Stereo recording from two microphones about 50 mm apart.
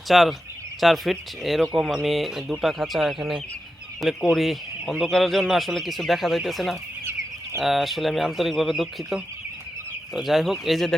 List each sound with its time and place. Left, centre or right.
0.1 s speech: centre
7.0 s chicken: right
7.6 s speech: centre
10.2 s speech: centre